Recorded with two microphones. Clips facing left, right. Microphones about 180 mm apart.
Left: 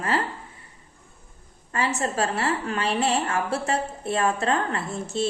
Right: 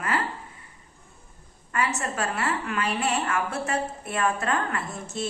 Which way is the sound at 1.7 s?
30° left (ahead or behind).